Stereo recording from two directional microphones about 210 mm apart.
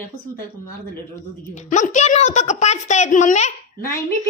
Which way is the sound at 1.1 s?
35° left (ahead or behind).